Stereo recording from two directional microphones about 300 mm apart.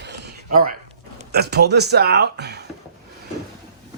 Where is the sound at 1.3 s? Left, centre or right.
Right.